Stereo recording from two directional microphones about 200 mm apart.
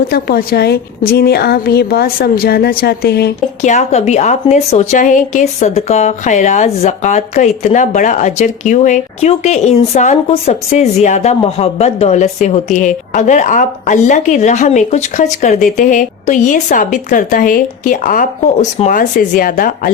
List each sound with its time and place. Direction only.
0.1 s a woman's voice: 50° left (ahead or behind)
3.6 s a woman's voice: 35° left (ahead or behind)